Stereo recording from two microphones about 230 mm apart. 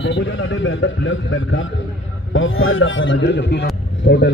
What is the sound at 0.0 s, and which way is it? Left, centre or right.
A man's voice, left.